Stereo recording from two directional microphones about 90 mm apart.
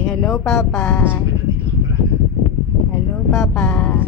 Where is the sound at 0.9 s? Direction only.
25° left (ahead or behind).